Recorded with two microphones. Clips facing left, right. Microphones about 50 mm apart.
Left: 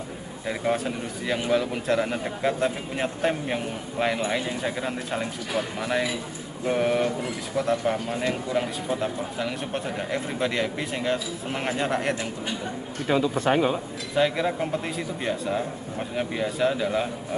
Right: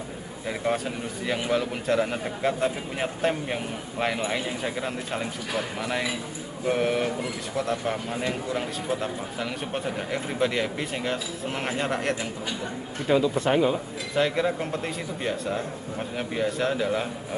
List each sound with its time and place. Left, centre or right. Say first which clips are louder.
0.5 s a man's voice: left 1 dB; centre
13.1 s speech: even; left
14.1 s speech: left 1 dB; centre